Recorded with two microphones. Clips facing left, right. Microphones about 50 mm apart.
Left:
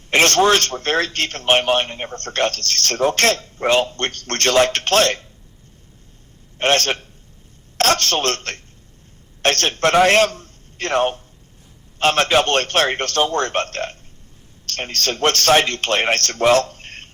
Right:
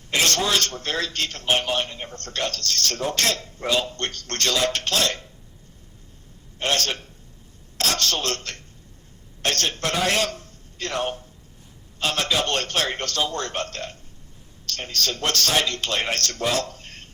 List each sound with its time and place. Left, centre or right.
0.1 s a man's voice: left
6.6 s a man's voice: left